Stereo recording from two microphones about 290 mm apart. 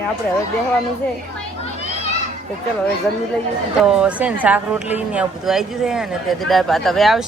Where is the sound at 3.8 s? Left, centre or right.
Centre.